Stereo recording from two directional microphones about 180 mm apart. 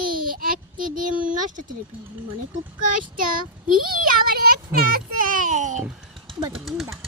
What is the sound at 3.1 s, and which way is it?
Child singing, 50° right (ahead or behind).